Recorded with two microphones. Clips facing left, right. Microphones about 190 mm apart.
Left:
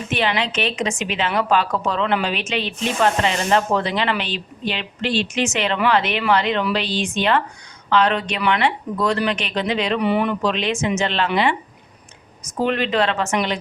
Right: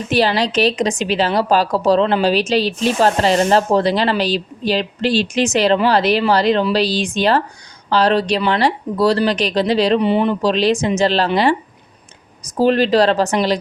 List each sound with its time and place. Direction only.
0.1 s a woman's voice: 35° right (ahead or behind)